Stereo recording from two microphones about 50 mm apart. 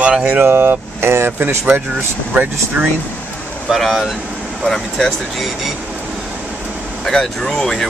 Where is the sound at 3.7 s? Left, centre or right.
Centre.